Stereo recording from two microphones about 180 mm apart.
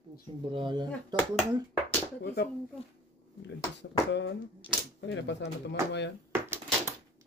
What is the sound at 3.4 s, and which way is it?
Speech, 75° left (ahead or behind).